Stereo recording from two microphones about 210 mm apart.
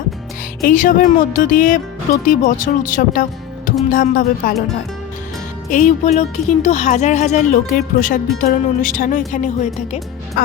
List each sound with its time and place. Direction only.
0.6 s speech: 40° left (ahead or behind)
5.7 s speech: 35° left (ahead or behind)
10.4 s music: 45° left (ahead or behind)